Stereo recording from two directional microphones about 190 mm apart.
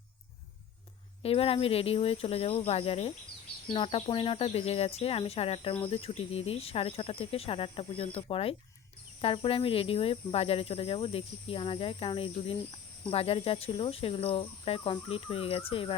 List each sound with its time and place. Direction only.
1.2 s speech: 30° left (ahead or behind)